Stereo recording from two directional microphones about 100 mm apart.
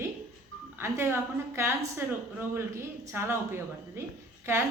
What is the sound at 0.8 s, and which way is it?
Speech, 25° right (ahead or behind).